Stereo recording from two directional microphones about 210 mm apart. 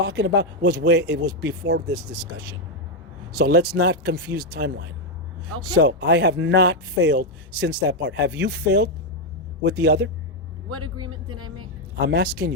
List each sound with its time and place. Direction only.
0.0 s speech: 55° right (ahead or behind); by 2.0 s 75° right (ahead or behind)
3.3 s speech: 50° right (ahead or behind)
5.9 s speech: 55° right (ahead or behind)
10.8 s a woman's voice: 20° right (ahead or behind)
12.0 s speech: 50° right (ahead or behind)